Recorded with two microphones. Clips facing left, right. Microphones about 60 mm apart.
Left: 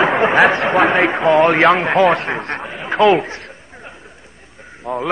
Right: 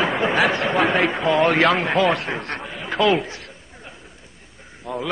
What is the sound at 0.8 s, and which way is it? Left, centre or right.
Speech, left.